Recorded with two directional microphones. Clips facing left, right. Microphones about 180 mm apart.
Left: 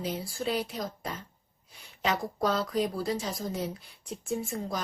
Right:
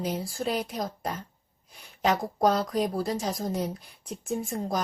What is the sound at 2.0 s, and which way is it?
A woman's voice, 45° right (ahead or behind).